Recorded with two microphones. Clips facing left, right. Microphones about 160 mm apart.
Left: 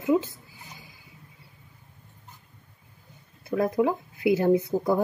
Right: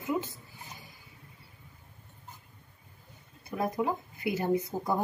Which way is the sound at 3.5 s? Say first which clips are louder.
Left 7 dB; 90° left.